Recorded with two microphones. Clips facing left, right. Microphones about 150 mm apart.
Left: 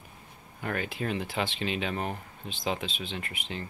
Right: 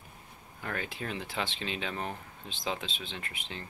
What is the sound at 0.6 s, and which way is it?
Speech, 55° left (ahead or behind).